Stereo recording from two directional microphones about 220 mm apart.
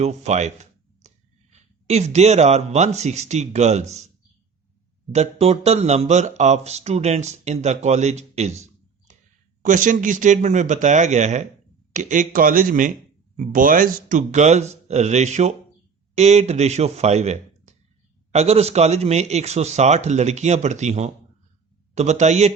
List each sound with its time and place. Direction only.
0.0 s speech: 30° right (ahead or behind)
5.1 s speech: 30° right (ahead or behind)
9.1 s clicking: 35° right (ahead or behind)
9.6 s speech: 35° right (ahead or behind)